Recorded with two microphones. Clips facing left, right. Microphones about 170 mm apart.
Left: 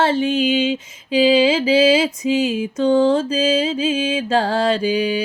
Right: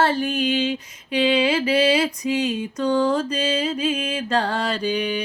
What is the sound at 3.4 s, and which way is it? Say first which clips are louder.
Music: left 4 dB; 25° left (ahead or behind).